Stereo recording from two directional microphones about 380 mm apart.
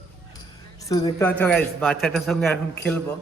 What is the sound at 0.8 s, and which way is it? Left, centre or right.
Speech, centre.